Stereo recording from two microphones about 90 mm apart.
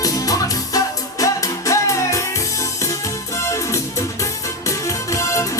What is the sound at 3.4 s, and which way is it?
Music, 35° left (ahead or behind).